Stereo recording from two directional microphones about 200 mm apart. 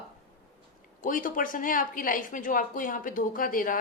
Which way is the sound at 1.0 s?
40° left (ahead or behind).